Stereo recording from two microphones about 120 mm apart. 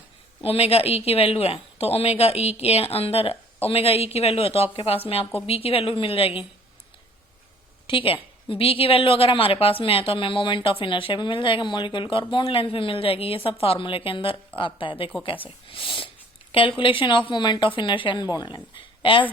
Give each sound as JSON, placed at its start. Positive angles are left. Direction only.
{"t": 0.4, "sound": "a woman's voice", "side_deg": 55}
{"t": 7.9, "sound": "a woman's voice", "side_deg": 50}